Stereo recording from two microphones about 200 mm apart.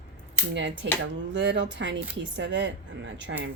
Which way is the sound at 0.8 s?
65° right (ahead or behind).